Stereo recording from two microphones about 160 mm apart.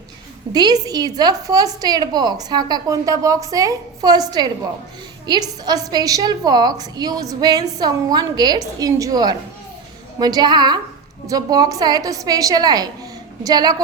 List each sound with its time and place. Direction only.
0.5 s a woman's voice: 25° right (ahead or behind)